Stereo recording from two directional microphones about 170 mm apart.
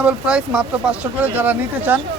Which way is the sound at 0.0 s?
5° right (ahead or behind).